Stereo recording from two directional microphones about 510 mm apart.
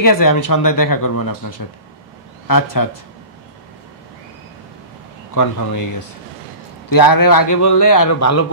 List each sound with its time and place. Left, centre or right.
0.0 s a man's voice: left
5.3 s a man's voice: left
6.9 s a man's voice: left